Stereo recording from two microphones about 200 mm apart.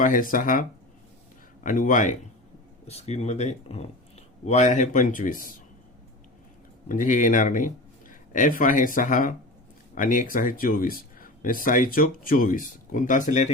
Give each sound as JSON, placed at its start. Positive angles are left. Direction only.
{"t": 0.0, "sound": "speech", "side_deg": 45}
{"t": 1.6, "sound": "speech", "side_deg": 40}
{"t": 6.8, "sound": "speech", "side_deg": 40}